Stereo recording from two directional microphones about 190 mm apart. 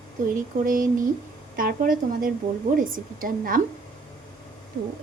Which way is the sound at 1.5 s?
45° right (ahead or behind).